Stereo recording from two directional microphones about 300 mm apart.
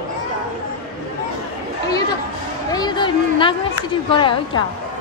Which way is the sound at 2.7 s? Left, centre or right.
Centre.